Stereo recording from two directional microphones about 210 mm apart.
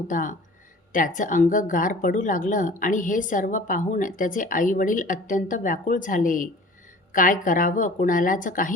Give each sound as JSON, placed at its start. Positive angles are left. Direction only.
{"t": 0.1, "sound": "a woman's voice", "side_deg": 40}